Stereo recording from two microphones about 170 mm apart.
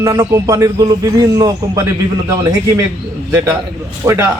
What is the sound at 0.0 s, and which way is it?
A man's voice, 15° right (ahead or behind).